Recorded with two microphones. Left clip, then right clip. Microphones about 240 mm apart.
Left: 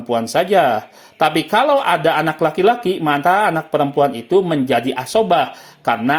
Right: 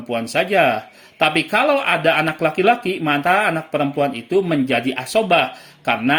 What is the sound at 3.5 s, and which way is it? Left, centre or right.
Speech, centre.